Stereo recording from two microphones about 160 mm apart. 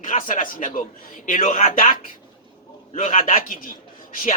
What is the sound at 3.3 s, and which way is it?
Speech, 55° left (ahead or behind).